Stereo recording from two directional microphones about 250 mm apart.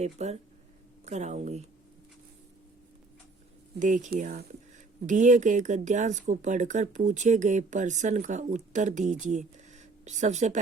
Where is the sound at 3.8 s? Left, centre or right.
Right.